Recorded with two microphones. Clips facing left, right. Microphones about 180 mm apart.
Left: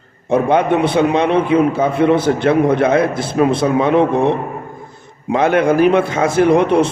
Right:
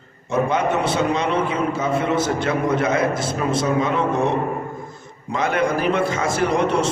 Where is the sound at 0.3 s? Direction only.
60° left (ahead or behind).